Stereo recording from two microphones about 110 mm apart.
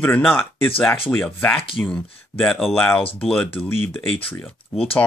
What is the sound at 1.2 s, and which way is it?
Speech, 15° left (ahead or behind).